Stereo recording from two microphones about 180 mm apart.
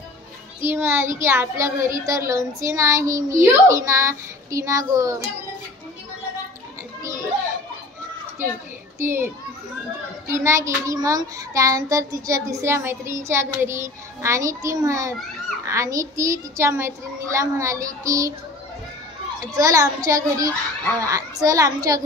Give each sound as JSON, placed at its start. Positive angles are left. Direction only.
{"t": 0.6, "sound": "child singing", "side_deg": -15}
{"t": 9.0, "sound": "child singing", "side_deg": -15}
{"t": 19.5, "sound": "a child's voice", "side_deg": -20}